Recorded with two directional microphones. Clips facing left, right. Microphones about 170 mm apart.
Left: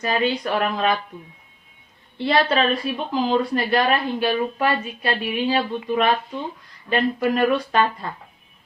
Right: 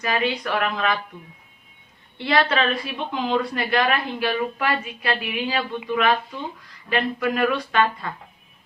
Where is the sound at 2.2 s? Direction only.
30° left (ahead or behind).